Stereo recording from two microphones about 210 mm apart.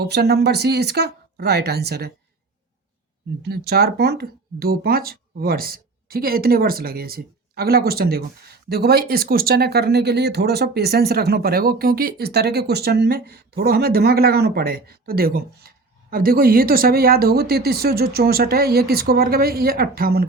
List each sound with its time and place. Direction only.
0.0 s speech: 50° right (ahead or behind)
3.4 s speech: 50° right (ahead or behind)